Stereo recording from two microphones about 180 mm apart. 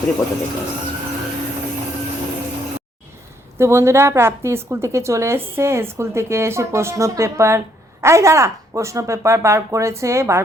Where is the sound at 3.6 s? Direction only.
15° right (ahead or behind).